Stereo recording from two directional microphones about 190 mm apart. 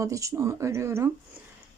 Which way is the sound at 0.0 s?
15° right (ahead or behind).